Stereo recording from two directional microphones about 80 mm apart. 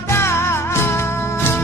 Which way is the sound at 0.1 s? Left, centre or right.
Left.